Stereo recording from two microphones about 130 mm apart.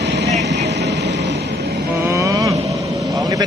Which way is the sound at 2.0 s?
25° right (ahead or behind).